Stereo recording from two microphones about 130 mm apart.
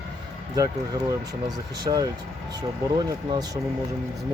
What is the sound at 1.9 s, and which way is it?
Speech, 45° right (ahead or behind).